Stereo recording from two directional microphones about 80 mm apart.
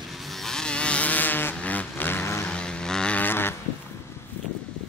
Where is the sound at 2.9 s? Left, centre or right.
Centre.